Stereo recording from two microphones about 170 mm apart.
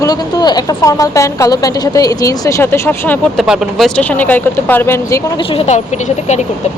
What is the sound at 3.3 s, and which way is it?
Speech, 5° right (ahead or behind).